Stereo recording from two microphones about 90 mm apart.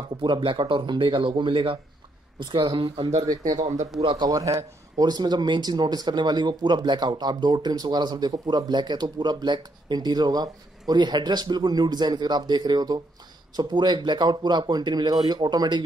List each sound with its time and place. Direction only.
0.2 s speech: 65° right (ahead or behind)